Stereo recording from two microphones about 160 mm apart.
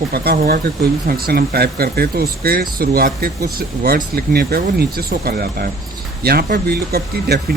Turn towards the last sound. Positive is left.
turn(degrees=-80)